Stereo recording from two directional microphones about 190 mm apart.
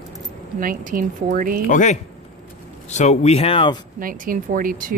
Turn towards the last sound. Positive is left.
turn(degrees=-45)  # may be behind; listen again after turning